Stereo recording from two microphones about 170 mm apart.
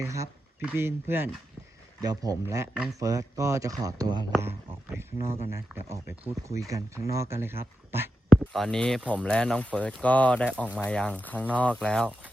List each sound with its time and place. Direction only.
0.0 s speech: 20° right (ahead or behind)
8.3 s speech: centre (ahead or behind)